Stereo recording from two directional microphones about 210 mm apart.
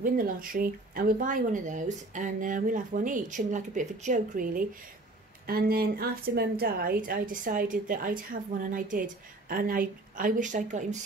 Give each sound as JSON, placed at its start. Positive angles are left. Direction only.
{"t": 0.0, "sound": "speech", "side_deg": -40}